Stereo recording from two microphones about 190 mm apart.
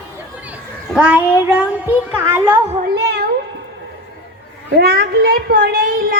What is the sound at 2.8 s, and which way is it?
Cat, 55° right (ahead or behind).